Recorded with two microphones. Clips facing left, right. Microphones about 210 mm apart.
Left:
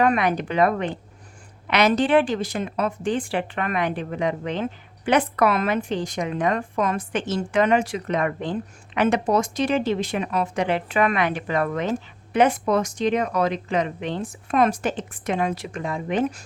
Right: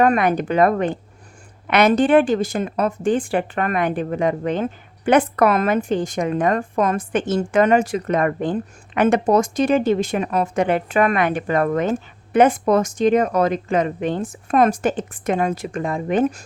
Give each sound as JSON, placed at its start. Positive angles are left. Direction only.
{"t": 0.0, "sound": "speech", "side_deg": -45}